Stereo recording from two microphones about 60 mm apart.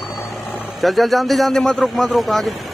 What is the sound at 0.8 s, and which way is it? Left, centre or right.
A man's voice, centre.